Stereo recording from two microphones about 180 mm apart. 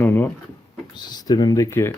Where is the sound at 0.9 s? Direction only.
25° left (ahead or behind).